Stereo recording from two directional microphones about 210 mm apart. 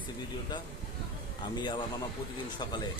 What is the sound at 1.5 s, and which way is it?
Speech, 20° left (ahead or behind).